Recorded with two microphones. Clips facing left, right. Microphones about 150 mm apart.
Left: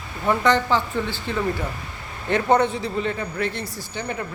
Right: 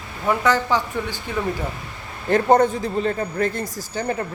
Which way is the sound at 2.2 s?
45° right (ahead or behind).